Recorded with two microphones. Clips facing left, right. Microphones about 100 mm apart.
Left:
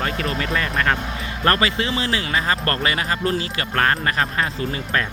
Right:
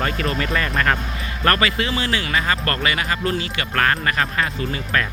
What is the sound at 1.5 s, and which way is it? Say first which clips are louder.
Speech: even; 25° left (ahead or behind).